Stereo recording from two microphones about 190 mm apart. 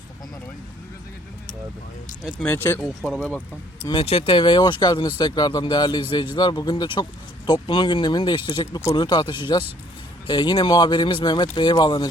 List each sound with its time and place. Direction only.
2.2 s speech: 10° left (ahead or behind)
3.8 s speech: 30° left (ahead or behind)